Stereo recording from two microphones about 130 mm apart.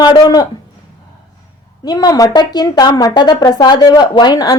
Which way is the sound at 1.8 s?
30° left (ahead or behind).